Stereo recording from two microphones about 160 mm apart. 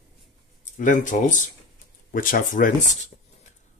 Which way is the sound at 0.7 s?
55° left (ahead or behind).